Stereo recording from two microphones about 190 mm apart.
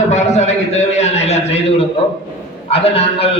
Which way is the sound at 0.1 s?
35° left (ahead or behind).